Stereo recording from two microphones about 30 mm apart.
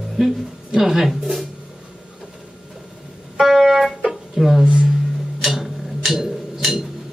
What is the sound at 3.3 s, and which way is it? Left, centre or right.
Music, centre.